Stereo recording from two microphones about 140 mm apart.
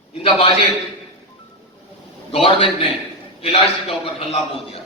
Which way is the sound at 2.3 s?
40° left (ahead or behind).